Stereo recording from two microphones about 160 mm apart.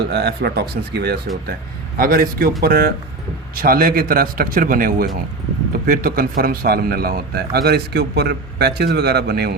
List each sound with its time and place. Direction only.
0.1 s speech: 90° right
2.0 s a man's voice: 65° right (ahead or behind); by 9.5 s 80° right